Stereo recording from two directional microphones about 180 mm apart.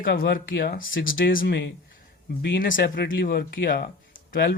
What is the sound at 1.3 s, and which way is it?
Speech, 65° left (ahead or behind).